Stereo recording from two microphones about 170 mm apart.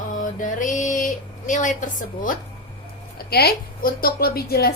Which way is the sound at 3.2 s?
70° left (ahead or behind).